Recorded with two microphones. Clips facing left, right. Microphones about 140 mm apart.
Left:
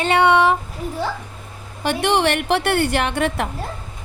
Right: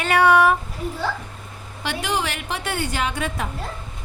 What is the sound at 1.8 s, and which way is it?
A woman's voice, 55° left (ahead or behind).